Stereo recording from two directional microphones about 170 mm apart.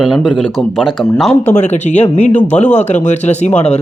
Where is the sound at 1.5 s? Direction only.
40° left (ahead or behind).